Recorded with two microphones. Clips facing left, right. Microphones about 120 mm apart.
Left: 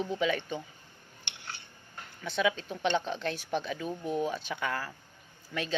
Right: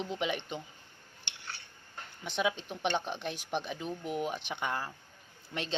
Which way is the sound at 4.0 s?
25° left (ahead or behind).